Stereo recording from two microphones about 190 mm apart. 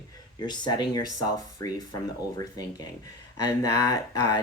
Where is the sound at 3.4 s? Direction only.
20° left (ahead or behind).